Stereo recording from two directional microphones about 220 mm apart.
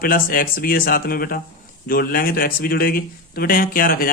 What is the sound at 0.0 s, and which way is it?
A man's voice, 40° left (ahead or behind).